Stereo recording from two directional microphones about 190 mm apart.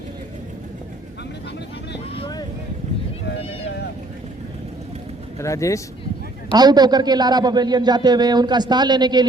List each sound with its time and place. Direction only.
2.1 s vehicle: 30° left (ahead or behind)
5.4 s speech: 15° left (ahead or behind)
6.5 s a man's voice: 20° right (ahead or behind)